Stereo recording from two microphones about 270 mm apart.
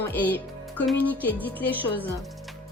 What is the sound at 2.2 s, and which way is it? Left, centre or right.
Music, centre.